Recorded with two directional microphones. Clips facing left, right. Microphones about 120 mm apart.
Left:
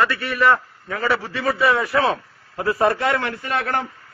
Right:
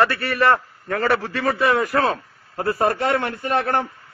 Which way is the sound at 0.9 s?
55° right (ahead or behind).